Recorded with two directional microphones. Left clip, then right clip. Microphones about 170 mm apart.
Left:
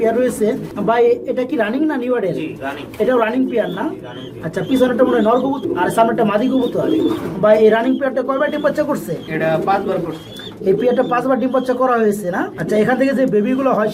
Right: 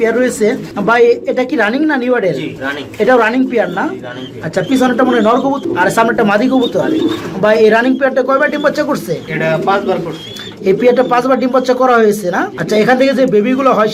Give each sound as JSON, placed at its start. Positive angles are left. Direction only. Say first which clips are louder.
{"t": 0.0, "sound": "speech", "louder": "right 4 dB", "side_deg": -15}
{"t": 9.4, "sound": "speech", "louder": "right 3 dB", "side_deg": -50}
{"t": 10.7, "sound": "speech", "louder": "right 5 dB", "side_deg": -15}